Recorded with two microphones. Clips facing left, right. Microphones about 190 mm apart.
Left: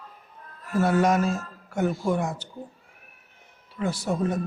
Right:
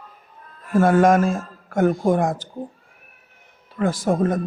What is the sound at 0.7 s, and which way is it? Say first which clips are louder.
Speech: right 6 dB; 50° right (ahead or behind).